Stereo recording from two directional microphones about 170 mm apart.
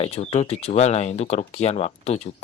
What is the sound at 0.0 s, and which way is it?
Speech, 40° left (ahead or behind).